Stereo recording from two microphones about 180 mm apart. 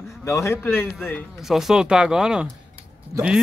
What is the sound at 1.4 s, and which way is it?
Speech, centre (ahead or behind).